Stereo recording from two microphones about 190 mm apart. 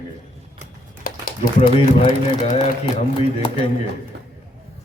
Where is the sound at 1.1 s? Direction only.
50° left (ahead or behind).